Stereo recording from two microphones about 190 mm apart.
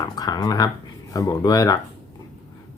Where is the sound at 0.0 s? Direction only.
20° left (ahead or behind).